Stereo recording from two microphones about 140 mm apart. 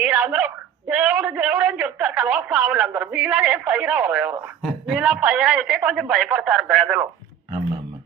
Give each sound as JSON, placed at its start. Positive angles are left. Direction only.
{"t": 0.0, "sound": "a woman's voice", "side_deg": -5}